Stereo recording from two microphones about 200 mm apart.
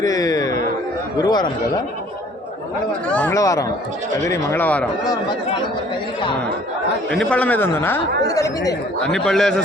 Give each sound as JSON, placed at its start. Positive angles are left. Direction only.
{"t": 0.0, "sound": "music", "side_deg": 15}
{"t": 1.2, "sound": "speech", "side_deg": 20}
{"t": 3.1, "sound": "speech", "side_deg": 5}
{"t": 3.3, "sound": "speech", "side_deg": 15}
{"t": 7.1, "sound": "speech", "side_deg": 5}
{"t": 9.0, "sound": "a man's voice", "side_deg": 5}